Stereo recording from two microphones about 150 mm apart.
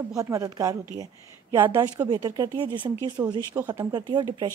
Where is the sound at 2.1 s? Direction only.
25° right (ahead or behind).